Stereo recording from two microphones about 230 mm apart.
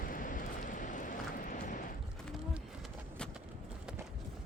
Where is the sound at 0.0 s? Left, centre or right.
Left.